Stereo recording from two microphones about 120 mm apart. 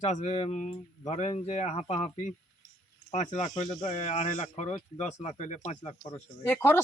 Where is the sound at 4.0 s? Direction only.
70° left (ahead or behind).